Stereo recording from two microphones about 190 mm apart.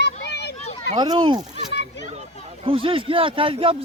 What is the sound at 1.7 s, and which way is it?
Children playing, 65° left (ahead or behind).